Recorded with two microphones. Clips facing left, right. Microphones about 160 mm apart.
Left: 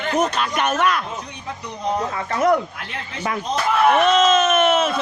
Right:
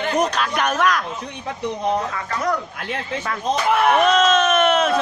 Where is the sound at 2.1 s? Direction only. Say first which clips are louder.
Left 5 dB; 25° left (ahead or behind).